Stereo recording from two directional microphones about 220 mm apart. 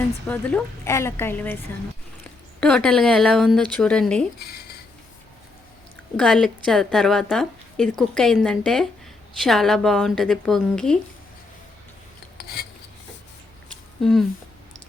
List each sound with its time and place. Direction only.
0.3 s a woman's voice: 5° left (ahead or behind)
2.6 s a woman's voice: 5° left (ahead or behind)
4.4 s speech: 45° left (ahead or behind)
6.1 s a woman's voice: 5° left (ahead or behind)
14.0 s a woman's voice: centre (ahead or behind)